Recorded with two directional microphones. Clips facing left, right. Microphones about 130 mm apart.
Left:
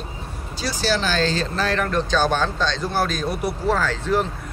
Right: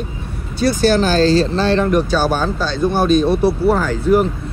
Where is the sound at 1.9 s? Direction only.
10° right (ahead or behind).